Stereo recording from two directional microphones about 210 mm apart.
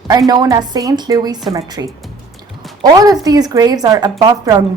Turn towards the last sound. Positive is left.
turn(degrees=-20)  # may be behind; listen again after turning